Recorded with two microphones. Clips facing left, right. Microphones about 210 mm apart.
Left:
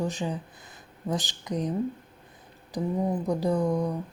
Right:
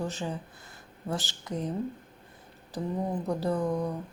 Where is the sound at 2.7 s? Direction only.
15° left (ahead or behind).